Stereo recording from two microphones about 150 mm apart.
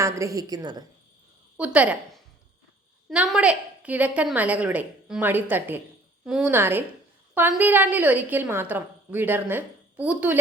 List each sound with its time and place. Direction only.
0.0 s a woman's voice: 20° right (ahead or behind)
1.5 s a woman's voice: 10° right (ahead or behind)